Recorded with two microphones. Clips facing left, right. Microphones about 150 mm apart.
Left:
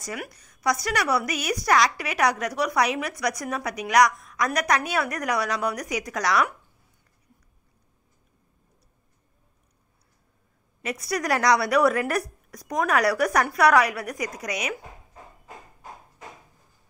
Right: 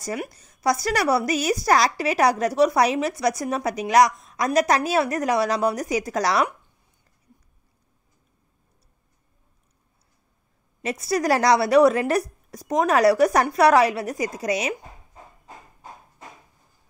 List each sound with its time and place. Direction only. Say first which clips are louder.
0.0 s a woman's voice: right 5 dB; 30° right (ahead or behind)
10.8 s a woman's voice: right 5 dB; 30° right (ahead or behind)